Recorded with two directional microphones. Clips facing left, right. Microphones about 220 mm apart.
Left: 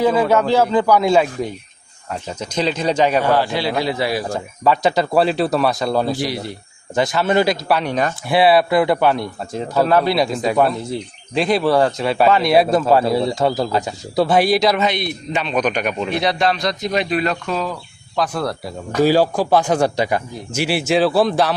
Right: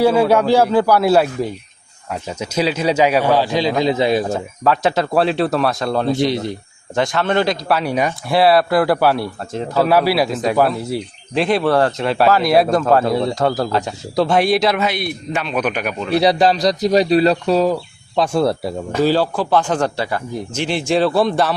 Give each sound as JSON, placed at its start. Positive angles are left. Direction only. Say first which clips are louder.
{"t": 0.0, "sound": "a man's voice", "louder": "right 2 dB", "side_deg": -10}
{"t": 4.3, "sound": "speech", "louder": "even", "side_deg": 0}
{"t": 6.1, "sound": "speech", "louder": "right 5 dB", "side_deg": -20}
{"t": 6.9, "sound": "speech", "louder": "left 1 dB", "side_deg": 5}
{"t": 8.3, "sound": "speech", "louder": "even", "side_deg": 0}
{"t": 16.1, "sound": "speech", "louder": "right 7 dB", "side_deg": -35}
{"t": 18.2, "sound": "speech", "louder": "right 5 dB", "side_deg": -25}
{"t": 19.0, "sound": "a man's voice", "louder": "left 2 dB", "side_deg": 10}